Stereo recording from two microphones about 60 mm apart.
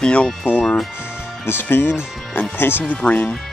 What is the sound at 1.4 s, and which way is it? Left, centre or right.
Speech, left.